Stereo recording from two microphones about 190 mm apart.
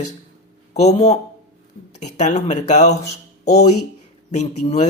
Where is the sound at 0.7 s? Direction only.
35° left (ahead or behind).